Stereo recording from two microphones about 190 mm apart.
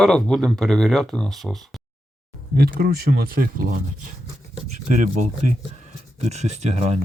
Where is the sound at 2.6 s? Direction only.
55° right (ahead or behind).